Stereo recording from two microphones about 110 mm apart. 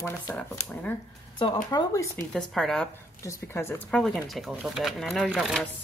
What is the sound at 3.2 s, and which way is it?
Speech, 25° left (ahead or behind).